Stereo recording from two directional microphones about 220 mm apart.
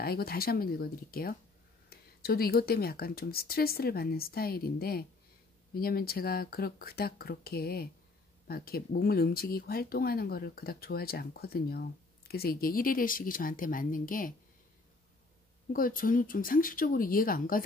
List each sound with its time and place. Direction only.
0.0 s speech: 45° left (ahead or behind)
15.7 s speech: 40° left (ahead or behind)